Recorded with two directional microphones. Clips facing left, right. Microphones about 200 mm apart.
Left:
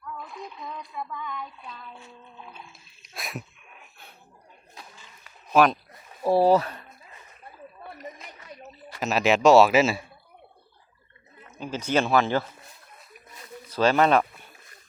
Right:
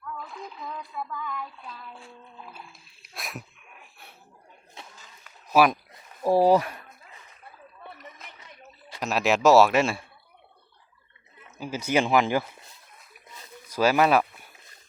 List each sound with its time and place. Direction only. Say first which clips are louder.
0.0 s a sound: even; centre (ahead or behind)
2.4 s speech: even; 5° right (ahead or behind)
3.0 s dog: left 2 dB; centre (ahead or behind)
4.8 s a sound: right 1 dB; 25° right (ahead or behind)
5.2 s a sound: left 1 dB; 5° right (ahead or behind)
6.2 s speech: even; 10° right (ahead or behind)
9.0 s speech: left 2 dB; centre (ahead or behind)
11.5 s speech: even; 10° right (ahead or behind)
13.7 s speech: left 1 dB; 10° right (ahead or behind)